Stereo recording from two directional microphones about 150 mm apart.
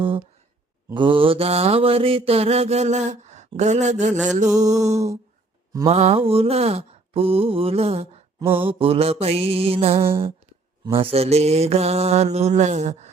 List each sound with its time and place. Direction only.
0.9 s mantra: 35° right (ahead or behind); by 4.9 s 50° right (ahead or behind)
5.9 s mantra: 45° right (ahead or behind)
8.4 s mantra: 15° right (ahead or behind)
8.6 s mantra: 40° right (ahead or behind)